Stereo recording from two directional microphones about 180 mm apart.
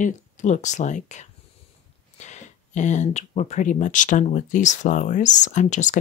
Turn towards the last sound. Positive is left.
turn(degrees=40)  # may be behind; listen again after turning